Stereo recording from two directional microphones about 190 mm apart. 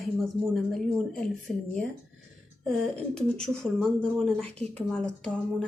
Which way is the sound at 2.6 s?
5° left (ahead or behind).